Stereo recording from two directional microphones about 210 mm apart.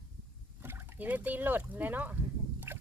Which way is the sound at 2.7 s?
10° right (ahead or behind).